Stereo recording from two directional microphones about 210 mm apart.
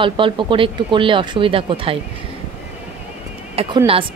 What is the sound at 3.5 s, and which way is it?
Speech, 25° right (ahead or behind).